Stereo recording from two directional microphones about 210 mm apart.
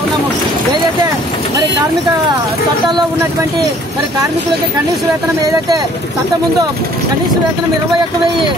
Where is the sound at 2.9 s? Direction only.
15° right (ahead or behind).